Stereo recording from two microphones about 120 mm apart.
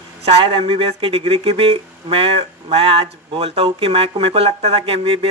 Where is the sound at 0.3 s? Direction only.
50° right (ahead or behind).